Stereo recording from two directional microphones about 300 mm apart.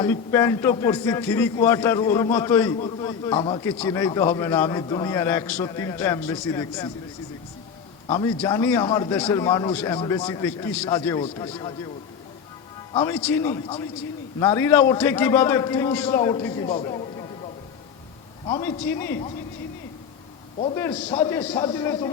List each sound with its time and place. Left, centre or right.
0.0 s a man's voice: centre
8.0 s a man's voice: centre
12.9 s a man's voice: centre
18.4 s a man's voice: centre
20.7 s a man's voice: centre